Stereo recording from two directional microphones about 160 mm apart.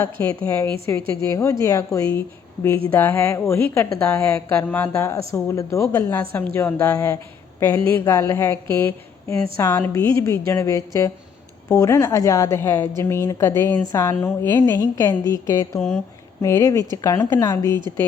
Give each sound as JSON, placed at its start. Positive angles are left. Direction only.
{"t": 0.0, "sound": "a woman's voice", "side_deg": 10}
{"t": 15.3, "sound": "mantra", "side_deg": 20}